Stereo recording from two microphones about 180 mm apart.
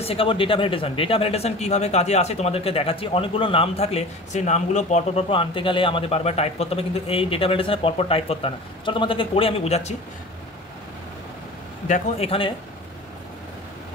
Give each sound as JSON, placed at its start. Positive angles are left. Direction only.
{"t": 0.0, "sound": "speech", "side_deg": 30}
{"t": 11.9, "sound": "speech", "side_deg": 35}